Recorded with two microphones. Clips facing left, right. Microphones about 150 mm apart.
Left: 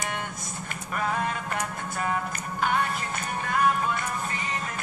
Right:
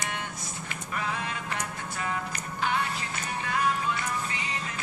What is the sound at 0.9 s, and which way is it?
Music, 50° left (ahead or behind).